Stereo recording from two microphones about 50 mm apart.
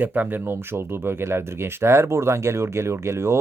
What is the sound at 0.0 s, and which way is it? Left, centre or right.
Speech, right.